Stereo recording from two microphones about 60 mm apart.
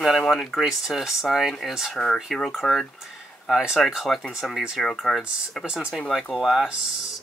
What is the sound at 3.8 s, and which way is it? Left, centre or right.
Speech, centre.